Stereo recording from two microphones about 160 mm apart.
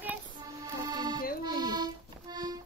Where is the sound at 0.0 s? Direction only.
10° right (ahead or behind).